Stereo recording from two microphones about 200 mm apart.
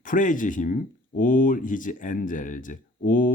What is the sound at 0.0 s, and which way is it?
Speech, 40° left (ahead or behind).